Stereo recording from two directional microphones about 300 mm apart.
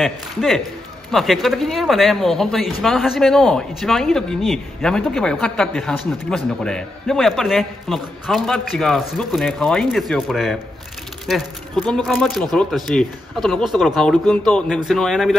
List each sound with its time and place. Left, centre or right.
0.0 s speech: centre